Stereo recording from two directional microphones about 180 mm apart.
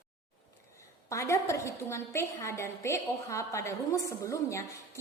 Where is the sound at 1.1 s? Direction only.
15° left (ahead or behind).